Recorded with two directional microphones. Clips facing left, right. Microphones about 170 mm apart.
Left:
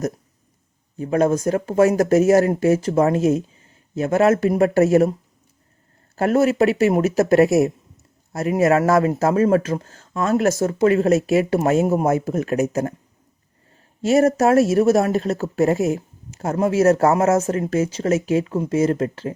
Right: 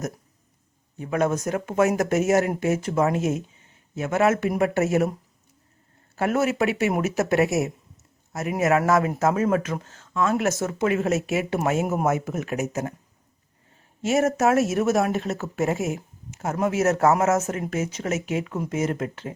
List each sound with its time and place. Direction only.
0.9 s speech: 35° left (ahead or behind)
6.1 s speech: 35° left (ahead or behind)
14.0 s speech: 35° left (ahead or behind)